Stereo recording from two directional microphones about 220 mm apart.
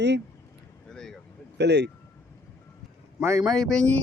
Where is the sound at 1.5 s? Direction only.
50° right (ahead or behind).